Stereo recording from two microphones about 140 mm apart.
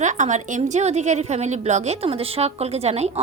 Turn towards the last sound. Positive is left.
turn(degrees=-50)  # may be behind; listen again after turning